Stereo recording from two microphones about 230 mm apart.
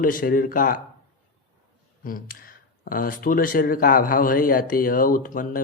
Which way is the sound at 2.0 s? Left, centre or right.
Left.